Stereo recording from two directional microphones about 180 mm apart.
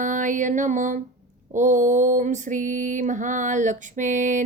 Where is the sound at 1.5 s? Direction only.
45° right (ahead or behind).